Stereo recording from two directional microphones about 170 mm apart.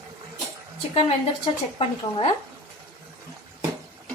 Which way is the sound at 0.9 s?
35° left (ahead or behind).